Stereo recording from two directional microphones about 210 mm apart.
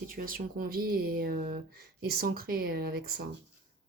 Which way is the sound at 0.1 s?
40° right (ahead or behind).